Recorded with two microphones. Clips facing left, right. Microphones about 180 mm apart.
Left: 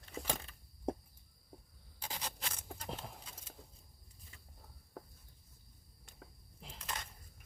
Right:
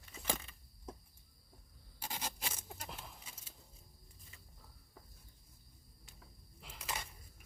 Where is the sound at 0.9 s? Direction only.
65° left (ahead or behind).